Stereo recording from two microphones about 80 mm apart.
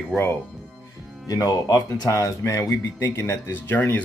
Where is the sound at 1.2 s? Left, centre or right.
Left.